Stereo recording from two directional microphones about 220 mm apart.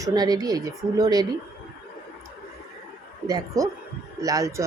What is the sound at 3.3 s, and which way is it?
Speech, 15° right (ahead or behind).